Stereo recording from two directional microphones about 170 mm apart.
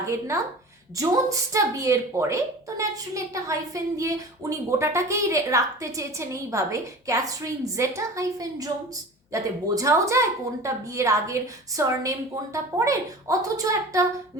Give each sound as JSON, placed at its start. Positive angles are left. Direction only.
{"t": 0.9, "sound": "a woman's voice", "side_deg": -20}